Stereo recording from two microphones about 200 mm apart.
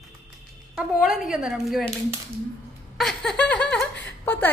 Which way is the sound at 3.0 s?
5° left (ahead or behind).